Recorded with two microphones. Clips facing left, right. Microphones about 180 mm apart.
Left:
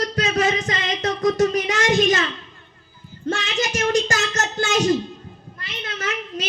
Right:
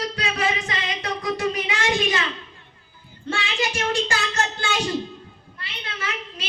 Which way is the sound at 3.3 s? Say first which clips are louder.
Left 3 dB; 45° left (ahead or behind).